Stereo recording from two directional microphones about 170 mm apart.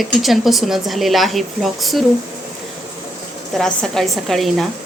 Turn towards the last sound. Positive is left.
turn(degrees=0)  # may be behind; listen again after turning